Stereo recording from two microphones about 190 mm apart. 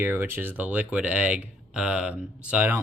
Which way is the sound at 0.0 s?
10° right (ahead or behind).